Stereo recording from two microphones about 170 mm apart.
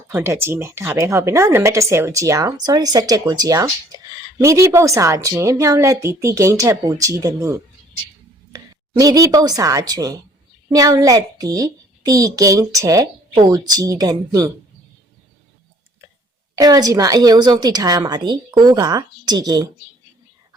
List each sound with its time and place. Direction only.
0.1 s a woman's voice: 15° right (ahead or behind)
16.6 s a child's voice: 20° right (ahead or behind)